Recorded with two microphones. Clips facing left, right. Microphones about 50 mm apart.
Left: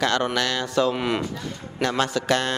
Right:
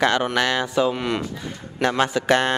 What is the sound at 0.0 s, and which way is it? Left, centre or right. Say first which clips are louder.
Speech: right 3 dB; centre.